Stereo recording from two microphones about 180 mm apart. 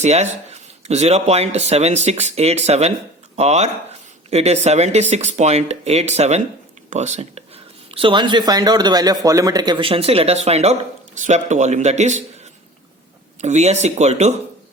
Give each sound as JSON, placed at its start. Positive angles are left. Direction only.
{"t": 0.0, "sound": "speech", "side_deg": -40}
{"t": 13.4, "sound": "speech", "side_deg": -40}